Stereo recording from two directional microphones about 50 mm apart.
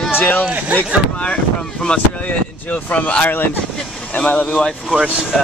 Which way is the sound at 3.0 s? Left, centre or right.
Left.